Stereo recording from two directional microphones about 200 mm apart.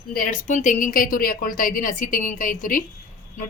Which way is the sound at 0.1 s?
40° left (ahead or behind).